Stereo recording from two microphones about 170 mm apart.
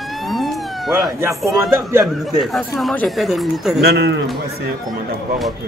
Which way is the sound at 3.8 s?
75° right (ahead or behind).